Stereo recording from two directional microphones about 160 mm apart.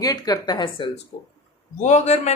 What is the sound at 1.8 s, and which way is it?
Speech, 50° left (ahead or behind).